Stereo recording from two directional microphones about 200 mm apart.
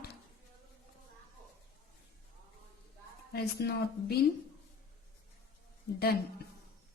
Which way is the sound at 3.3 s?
55° left (ahead or behind).